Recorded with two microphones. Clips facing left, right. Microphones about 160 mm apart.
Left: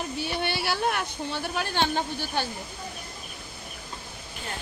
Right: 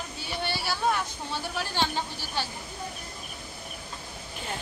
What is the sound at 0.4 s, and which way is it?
Speech, 60° left (ahead or behind).